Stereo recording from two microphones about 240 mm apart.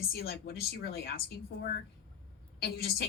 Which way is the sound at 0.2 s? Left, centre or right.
Left.